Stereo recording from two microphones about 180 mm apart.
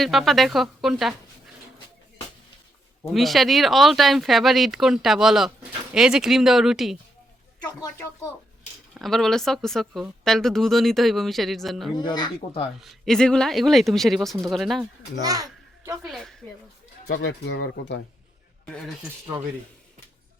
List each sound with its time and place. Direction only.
0.0 s speech: centre (ahead or behind)
3.1 s speech: centre (ahead or behind)
7.7 s speech: 15° left (ahead or behind)
9.0 s speech: centre (ahead or behind)
11.9 s speech: 25° left (ahead or behind)
12.8 s speech: centre (ahead or behind)
15.2 s a child's voice: 20° right (ahead or behind)
16.0 s speech: centre (ahead or behind)
17.1 s speech: 90° left
18.6 s speech: 5° left (ahead or behind)